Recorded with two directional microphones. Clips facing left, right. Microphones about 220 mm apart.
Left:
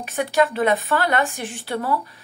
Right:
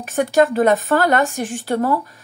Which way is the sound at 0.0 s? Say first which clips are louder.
Right 5 dB; 45° right (ahead or behind).